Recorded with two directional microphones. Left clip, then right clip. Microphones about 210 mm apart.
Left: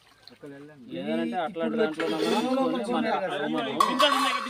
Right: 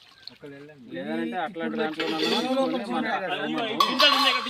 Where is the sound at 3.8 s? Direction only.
30° right (ahead or behind).